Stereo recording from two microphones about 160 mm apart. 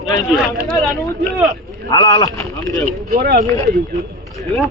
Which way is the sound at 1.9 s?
25° left (ahead or behind).